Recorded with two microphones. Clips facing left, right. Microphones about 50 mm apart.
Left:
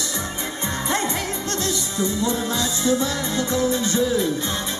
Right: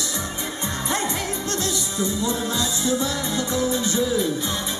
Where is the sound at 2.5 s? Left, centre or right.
Left.